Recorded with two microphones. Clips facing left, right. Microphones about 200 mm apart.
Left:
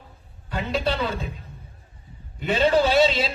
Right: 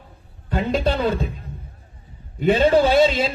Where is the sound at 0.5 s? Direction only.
50° right (ahead or behind).